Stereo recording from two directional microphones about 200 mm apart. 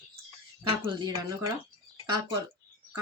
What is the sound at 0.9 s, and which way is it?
Speech, 25° right (ahead or behind).